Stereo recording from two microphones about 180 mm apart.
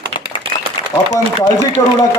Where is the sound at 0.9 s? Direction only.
30° left (ahead or behind).